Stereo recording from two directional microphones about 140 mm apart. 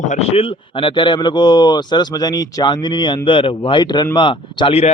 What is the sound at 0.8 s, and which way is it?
A man's voice, 35° left (ahead or behind).